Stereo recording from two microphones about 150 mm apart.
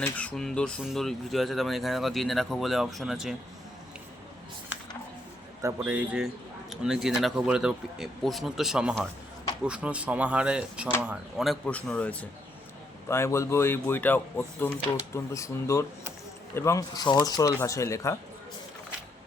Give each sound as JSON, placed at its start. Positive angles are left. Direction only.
{"t": 0.0, "sound": "speech", "side_deg": 10}
{"t": 5.6, "sound": "speech", "side_deg": -10}